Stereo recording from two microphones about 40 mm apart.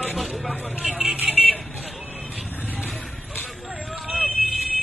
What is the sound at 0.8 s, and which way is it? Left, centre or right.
Vehicle, centre.